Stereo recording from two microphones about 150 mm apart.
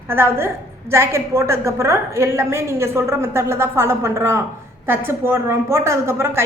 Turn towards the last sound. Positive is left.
turn(degrees=-15)  # may be behind; listen again after turning